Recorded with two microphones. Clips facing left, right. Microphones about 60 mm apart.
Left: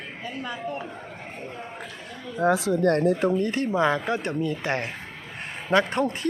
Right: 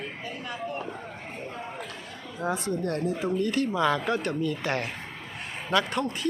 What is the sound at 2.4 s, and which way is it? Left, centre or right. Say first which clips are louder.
Speech: left 8 dB; left.